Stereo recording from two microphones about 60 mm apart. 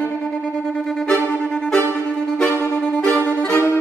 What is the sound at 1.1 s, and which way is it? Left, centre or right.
Music, left.